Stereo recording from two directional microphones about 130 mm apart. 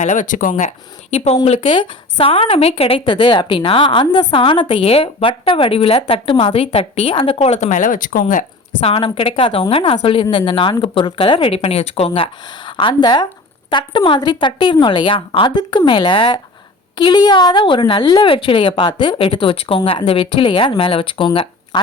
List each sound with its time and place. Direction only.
0.0 s speech: 80° left
1.1 s speech: 55° left (ahead or behind); by 8.4 s 85° left
8.8 s a woman's voice: 45° left (ahead or behind)